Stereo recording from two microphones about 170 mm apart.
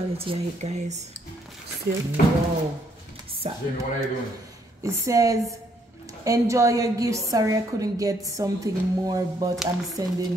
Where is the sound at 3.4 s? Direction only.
35° right (ahead or behind).